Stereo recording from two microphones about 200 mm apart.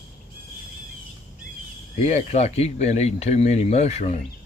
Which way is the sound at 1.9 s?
35° left (ahead or behind).